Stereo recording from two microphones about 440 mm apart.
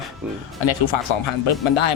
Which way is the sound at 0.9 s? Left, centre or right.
Left.